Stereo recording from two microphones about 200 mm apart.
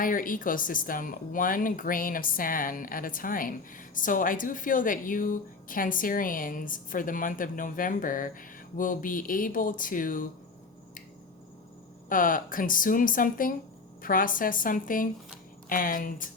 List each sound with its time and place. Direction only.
0.0 s speech: 45° left (ahead or behind)
12.0 s speech: 45° left (ahead or behind)